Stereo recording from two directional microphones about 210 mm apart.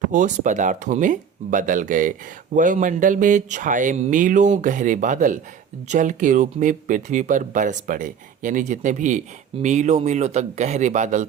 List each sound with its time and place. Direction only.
0.1 s speech: 35° right (ahead or behind)